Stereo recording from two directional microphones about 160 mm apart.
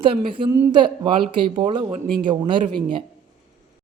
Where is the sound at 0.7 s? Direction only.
30° right (ahead or behind).